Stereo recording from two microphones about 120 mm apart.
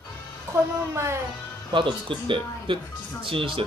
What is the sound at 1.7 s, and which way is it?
Speech, 45° right (ahead or behind).